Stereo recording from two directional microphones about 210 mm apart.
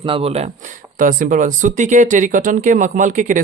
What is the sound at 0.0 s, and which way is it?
Speech, 25° right (ahead or behind).